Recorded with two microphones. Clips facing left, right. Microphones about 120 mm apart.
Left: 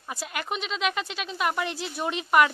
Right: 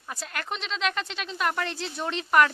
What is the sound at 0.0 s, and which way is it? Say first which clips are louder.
Speech: left 2 dB; 10° left (ahead or behind).